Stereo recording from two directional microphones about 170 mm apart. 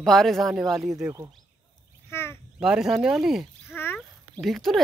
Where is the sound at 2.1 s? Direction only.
15° left (ahead or behind).